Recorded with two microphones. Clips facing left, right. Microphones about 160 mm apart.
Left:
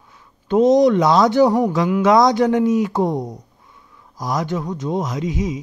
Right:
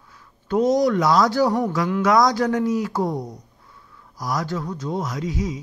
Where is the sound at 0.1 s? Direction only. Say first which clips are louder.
Left 4 dB; 20° left (ahead or behind).